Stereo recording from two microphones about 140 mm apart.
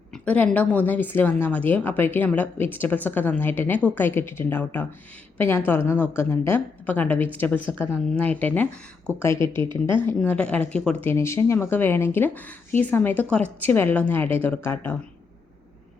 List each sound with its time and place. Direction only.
0.1 s a woman's voice: 10° left (ahead or behind)
11.1 s a woman's voice: 20° left (ahead or behind)